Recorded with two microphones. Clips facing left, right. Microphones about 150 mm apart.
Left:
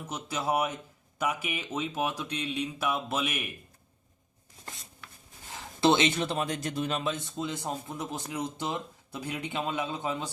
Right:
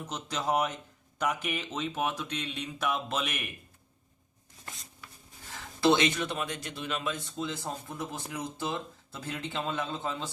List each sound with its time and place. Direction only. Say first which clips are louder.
0.1 s speech: left 1 dB; 10° left (ahead or behind)
5.8 s speech: left 1 dB; 25° left (ahead or behind)
7.3 s speech: left 2 dB; 20° left (ahead or behind)